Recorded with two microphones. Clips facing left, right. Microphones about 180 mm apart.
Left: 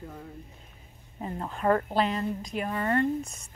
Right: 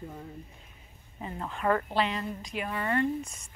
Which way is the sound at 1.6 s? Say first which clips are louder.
Left 2 dB; 35° left (ahead or behind).